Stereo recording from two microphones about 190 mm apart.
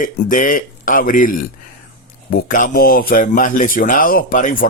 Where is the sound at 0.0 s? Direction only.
45° left (ahead or behind).